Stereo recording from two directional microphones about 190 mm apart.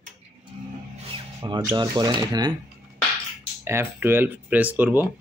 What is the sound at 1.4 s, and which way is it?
Speech, 20° right (ahead or behind).